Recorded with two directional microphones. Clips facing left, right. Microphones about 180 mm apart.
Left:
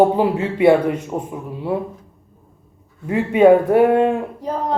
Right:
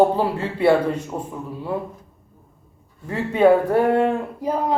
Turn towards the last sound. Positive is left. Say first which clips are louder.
# right 1 dB
turn(degrees=-10)  # may be behind; listen again after turning